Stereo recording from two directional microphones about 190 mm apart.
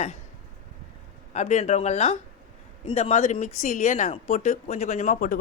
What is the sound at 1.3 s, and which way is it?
Speech, 40° left (ahead or behind).